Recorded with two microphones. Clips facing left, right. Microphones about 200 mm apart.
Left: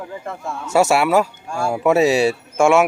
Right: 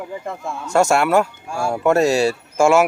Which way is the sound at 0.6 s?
5° left (ahead or behind).